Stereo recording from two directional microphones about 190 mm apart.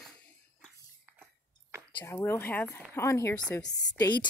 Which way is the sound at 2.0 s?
15° left (ahead or behind).